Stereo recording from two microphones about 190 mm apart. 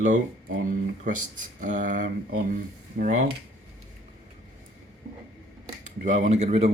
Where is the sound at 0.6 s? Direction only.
45° right (ahead or behind).